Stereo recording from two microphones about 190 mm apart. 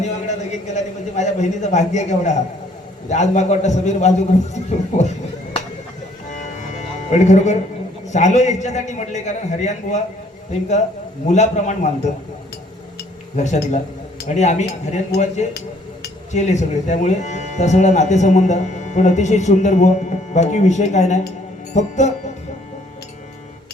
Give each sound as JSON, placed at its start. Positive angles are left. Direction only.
{"t": 0.0, "sound": "speech", "side_deg": 40}
{"t": 4.5, "sound": "a sound", "side_deg": 35}
{"t": 6.3, "sound": "music", "side_deg": 40}
{"t": 8.0, "sound": "speech", "side_deg": 40}
{"t": 13.3, "sound": "speech", "side_deg": 40}
{"t": 16.3, "sound": "speech", "side_deg": 40}